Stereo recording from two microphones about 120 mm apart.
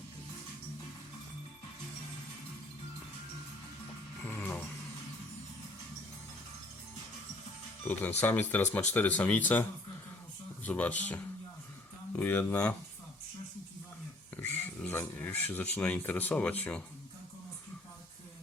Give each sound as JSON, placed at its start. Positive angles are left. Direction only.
{"t": 4.2, "sound": "music", "side_deg": 15}
{"t": 7.9, "sound": "speech", "side_deg": 10}
{"t": 14.3, "sound": "dog", "side_deg": 15}
{"t": 14.8, "sound": "speech", "side_deg": 15}